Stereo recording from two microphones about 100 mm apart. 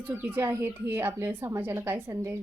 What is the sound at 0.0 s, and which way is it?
Speech, 20° right (ahead or behind).